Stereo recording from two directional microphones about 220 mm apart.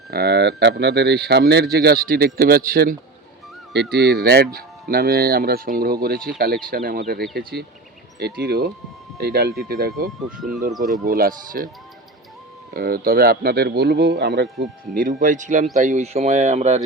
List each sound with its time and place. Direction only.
0.1 s speech: 45° right (ahead or behind)
10.7 s speech: centre (ahead or behind)
11.0 s speech: 40° right (ahead or behind)
12.7 s speech: 40° right (ahead or behind)
14.9 s speech: 40° right (ahead or behind)